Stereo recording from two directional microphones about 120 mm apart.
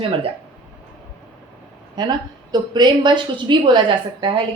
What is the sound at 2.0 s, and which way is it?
A woman's voice, 35° right (ahead or behind).